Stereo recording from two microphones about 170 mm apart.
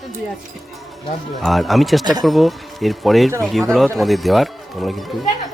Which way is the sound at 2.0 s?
25° right (ahead or behind).